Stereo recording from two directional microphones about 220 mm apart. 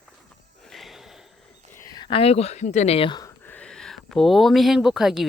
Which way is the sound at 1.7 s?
15° left (ahead or behind).